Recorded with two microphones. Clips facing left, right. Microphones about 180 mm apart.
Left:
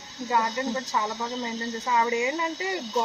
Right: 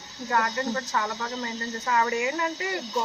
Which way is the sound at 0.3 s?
10° left (ahead or behind).